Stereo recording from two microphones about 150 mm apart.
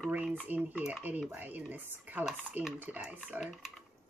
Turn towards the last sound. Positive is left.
turn(degrees=-5)  # may be behind; listen again after turning